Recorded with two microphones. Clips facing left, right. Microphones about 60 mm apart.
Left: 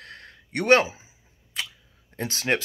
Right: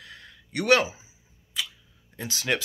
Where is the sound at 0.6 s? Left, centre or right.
Left.